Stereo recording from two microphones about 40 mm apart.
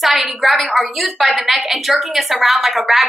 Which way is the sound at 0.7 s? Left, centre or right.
Centre.